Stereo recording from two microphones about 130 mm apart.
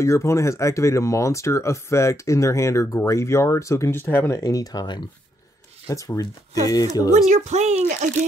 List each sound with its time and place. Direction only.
0.0 s speech: 20° left (ahead or behind)
7.2 s speech: 60° right (ahead or behind)